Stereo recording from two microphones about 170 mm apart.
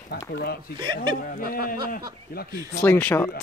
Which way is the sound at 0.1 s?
70° left (ahead or behind).